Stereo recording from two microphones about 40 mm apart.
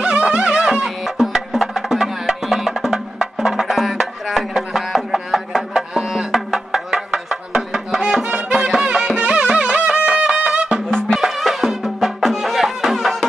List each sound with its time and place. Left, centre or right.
0.0 s music: right
0.8 s music: centre
5.7 s music: centre
8.5 s music: centre
9.2 s music: right
11.1 s music: centre